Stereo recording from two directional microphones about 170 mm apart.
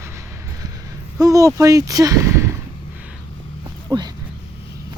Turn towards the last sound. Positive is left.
turn(degrees=-25)  # may be behind; listen again after turning